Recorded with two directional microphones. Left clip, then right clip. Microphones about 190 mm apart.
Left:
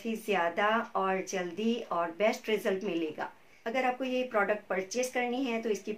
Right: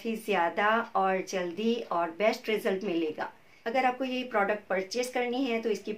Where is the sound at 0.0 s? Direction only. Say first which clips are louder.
Right 2 dB; 5° right (ahead or behind).